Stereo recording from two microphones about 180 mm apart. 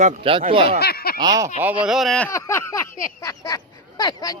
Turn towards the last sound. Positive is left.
turn(degrees=20)  # may be behind; listen again after turning